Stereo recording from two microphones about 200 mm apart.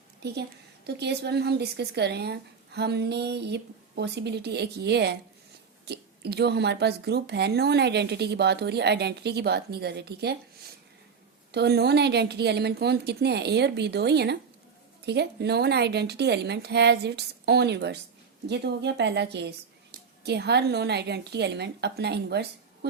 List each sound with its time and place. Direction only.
0.2 s a woman's voice: 55° right (ahead or behind)
11.5 s speech: 55° right (ahead or behind)